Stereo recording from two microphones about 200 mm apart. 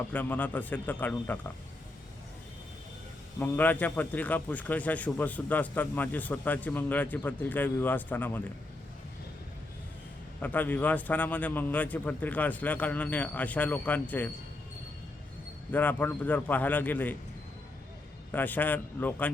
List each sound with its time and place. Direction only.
0.1 s a man's voice: 10° left (ahead or behind)
3.3 s a man's voice: 10° left (ahead or behind)
10.4 s a man's voice: 10° left (ahead or behind)
15.7 s a man's voice: 10° left (ahead or behind)
18.3 s a man's voice: 10° left (ahead or behind)